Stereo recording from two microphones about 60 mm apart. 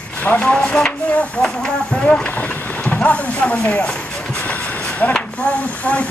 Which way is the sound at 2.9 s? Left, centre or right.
Left.